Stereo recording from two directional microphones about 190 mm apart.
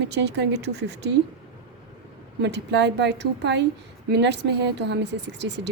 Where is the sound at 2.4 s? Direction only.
65° right (ahead or behind).